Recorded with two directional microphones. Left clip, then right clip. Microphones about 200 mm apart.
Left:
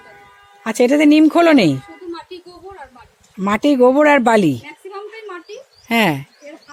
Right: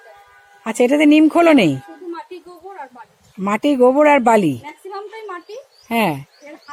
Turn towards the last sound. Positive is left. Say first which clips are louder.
# left 2 dB
turn(degrees=25)  # may be behind; listen again after turning